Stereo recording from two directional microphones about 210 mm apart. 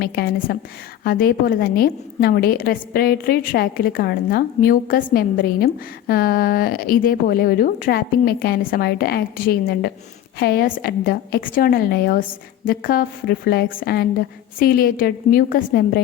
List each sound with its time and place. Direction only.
0.0 s a woman's voice: 45° left (ahead or behind)